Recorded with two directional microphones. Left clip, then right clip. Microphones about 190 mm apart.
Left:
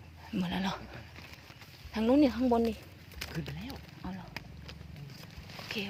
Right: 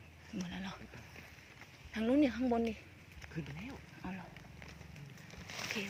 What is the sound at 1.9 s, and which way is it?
Speech, 35° left (ahead or behind).